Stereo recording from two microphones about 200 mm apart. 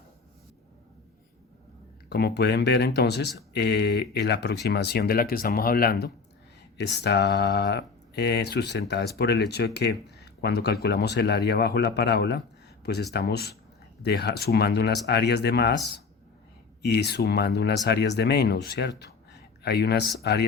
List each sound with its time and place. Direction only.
2.0 s speech: 55° left (ahead or behind)